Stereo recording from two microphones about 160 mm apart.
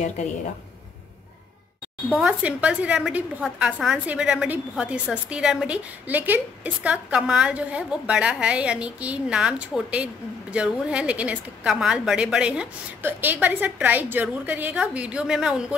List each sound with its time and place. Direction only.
2.1 s a woman's voice: 5° right (ahead or behind)